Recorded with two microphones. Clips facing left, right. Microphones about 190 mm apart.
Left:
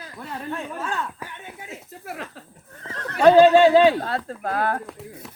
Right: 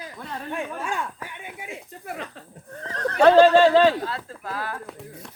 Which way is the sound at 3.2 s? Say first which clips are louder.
Left 1 dB; 5° left (ahead or behind).